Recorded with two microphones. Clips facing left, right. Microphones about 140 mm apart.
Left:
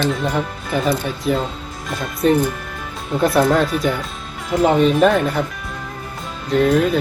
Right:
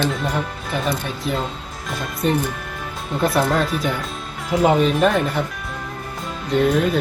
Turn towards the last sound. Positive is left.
turn(degrees=0)  # may be behind; listen again after turning